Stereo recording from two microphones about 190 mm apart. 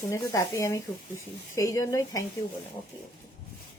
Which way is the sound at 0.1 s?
15° left (ahead or behind).